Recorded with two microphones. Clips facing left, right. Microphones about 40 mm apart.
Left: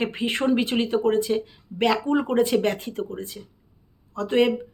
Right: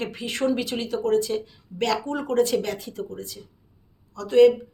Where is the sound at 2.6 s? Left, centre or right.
Left.